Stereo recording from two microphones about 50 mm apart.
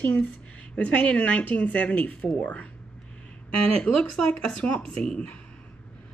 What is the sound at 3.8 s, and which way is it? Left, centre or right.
Speech, left.